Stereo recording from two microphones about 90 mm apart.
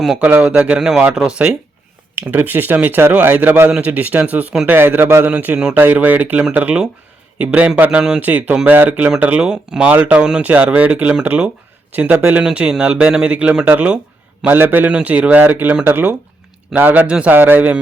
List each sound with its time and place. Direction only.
0.2 s a man's voice: 15° right (ahead or behind)